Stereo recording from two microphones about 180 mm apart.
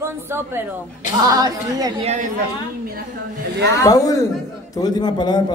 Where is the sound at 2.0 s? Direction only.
40° right (ahead or behind).